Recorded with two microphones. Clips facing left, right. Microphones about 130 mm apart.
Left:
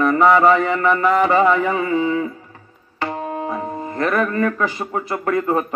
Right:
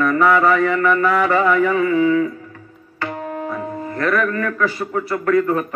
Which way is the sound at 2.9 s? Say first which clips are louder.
Left 1 dB; 20° left (ahead or behind).